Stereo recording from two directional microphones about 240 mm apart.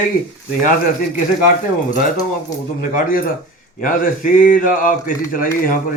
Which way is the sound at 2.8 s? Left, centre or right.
Left.